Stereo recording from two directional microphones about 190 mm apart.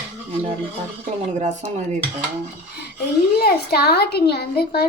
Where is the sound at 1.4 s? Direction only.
40° right (ahead or behind).